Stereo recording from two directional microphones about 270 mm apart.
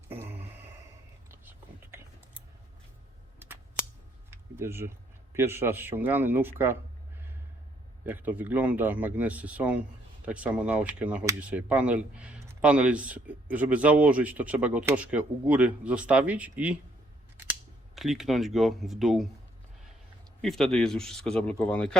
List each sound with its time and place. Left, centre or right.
0.2 s a sound: centre
1.3 s whispering: centre
4.3 s a sound: centre
5.3 s speech: centre
8.0 s speech: centre
17.9 s speech: centre
20.4 s speech: centre